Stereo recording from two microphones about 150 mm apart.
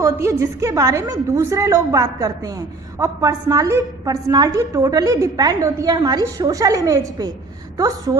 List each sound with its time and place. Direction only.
0.0 s a woman's voice: 20° right (ahead or behind)